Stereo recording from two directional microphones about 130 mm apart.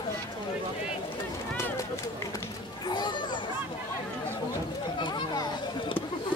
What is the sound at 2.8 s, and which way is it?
Speech, 35° left (ahead or behind).